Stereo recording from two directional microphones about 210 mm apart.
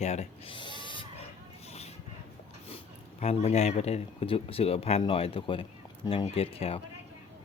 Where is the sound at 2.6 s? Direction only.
30° left (ahead or behind).